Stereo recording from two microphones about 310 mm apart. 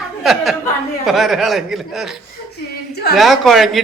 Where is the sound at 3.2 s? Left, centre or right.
Centre.